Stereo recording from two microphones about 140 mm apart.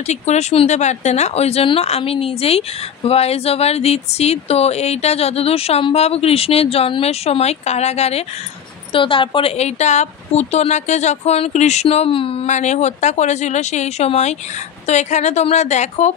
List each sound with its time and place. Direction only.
0.0 s speech: 55° left (ahead or behind)
8.9 s speech: 35° left (ahead or behind)
12.4 s speech: 55° left (ahead or behind)